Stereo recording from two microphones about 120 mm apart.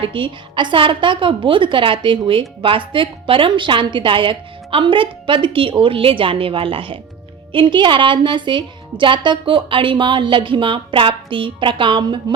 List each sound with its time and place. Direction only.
0.0 s a woman's voice: 45° right (ahead or behind)